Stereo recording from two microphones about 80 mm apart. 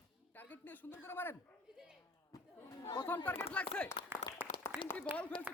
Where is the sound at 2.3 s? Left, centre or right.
Left.